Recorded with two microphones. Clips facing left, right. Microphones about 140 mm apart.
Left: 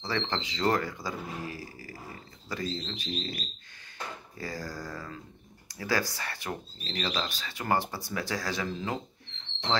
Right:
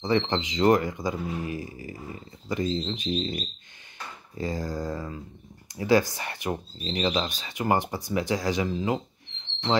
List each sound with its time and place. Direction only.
0.0 s speech: 20° right (ahead or behind)